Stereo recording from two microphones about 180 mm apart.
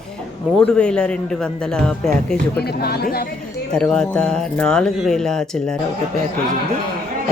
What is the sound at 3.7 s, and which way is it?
Speech, 5° left (ahead or behind).